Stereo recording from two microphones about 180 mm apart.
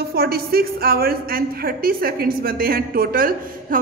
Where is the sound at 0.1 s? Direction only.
60° right (ahead or behind).